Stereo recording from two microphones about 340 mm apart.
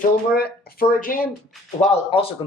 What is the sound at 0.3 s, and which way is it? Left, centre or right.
Speech, left.